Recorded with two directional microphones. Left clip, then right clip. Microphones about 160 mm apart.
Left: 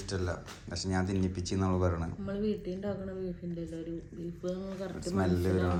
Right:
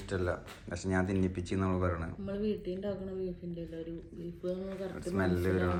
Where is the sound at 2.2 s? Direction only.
5° left (ahead or behind).